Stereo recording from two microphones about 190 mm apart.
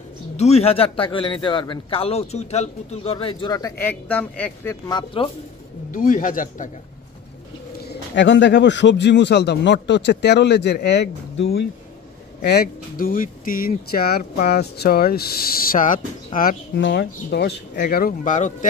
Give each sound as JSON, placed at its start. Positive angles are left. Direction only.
{"t": 0.4, "sound": "a man's voice", "side_deg": 30}
{"t": 4.8, "sound": "a man's voice", "side_deg": 25}
{"t": 5.9, "sound": "speech", "side_deg": 45}
{"t": 7.9, "sound": "speech", "side_deg": 65}
{"t": 12.4, "sound": "speech", "side_deg": 50}
{"t": 16.7, "sound": "speech", "side_deg": 65}